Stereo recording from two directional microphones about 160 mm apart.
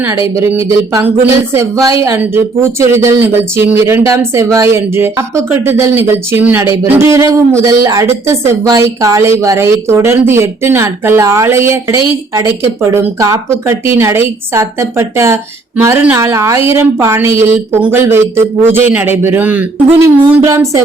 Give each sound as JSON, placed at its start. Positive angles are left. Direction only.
{"t": 0.1, "sound": "a man's voice", "side_deg": -20}